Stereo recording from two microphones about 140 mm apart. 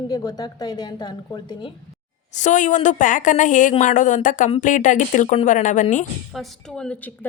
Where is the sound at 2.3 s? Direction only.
60° left (ahead or behind).